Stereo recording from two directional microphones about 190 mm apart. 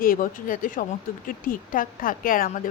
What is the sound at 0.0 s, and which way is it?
A woman's voice, 45° left (ahead or behind).